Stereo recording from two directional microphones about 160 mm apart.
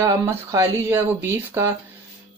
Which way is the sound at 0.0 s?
20° right (ahead or behind).